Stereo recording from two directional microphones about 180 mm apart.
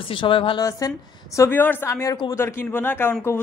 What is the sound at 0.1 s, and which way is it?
A woman's voice, 30° left (ahead or behind).